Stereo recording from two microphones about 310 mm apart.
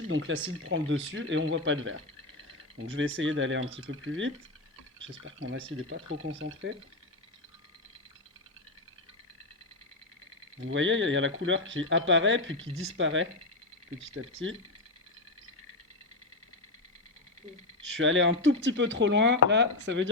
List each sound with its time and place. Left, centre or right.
0.6 s speech: right
10.6 s speech: right
17.9 s speech: right